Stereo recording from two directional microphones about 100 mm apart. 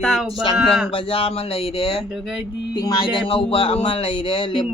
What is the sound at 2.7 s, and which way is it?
Speech, 45° left (ahead or behind).